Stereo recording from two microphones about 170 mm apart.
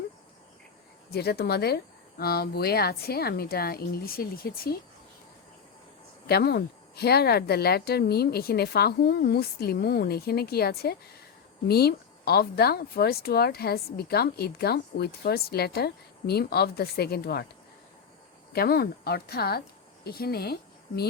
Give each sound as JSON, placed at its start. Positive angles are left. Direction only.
{"t": 1.1, "sound": "speech", "side_deg": 70}
{"t": 6.2, "sound": "speech", "side_deg": 70}
{"t": 18.5, "sound": "speech", "side_deg": 65}